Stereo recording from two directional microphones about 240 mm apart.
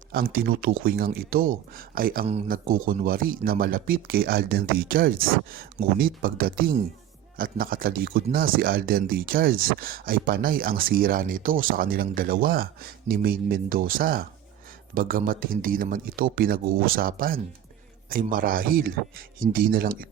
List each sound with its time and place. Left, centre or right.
0.1 s speech: right